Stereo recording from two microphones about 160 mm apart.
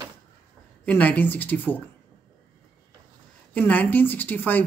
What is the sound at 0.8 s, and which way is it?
Speech, 10° left (ahead or behind).